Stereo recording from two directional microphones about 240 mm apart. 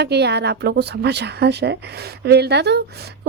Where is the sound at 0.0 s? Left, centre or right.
Right.